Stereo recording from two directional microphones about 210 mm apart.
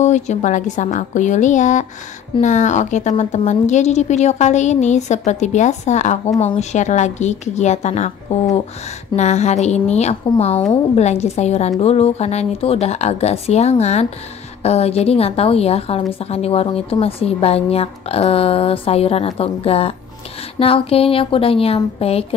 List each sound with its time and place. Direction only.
0.0 s a woman's voice: 35° left (ahead or behind)
9.1 s a woman's voice: 35° left (ahead or behind)